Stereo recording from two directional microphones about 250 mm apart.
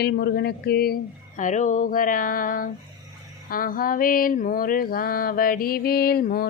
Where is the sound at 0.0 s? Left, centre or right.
Left.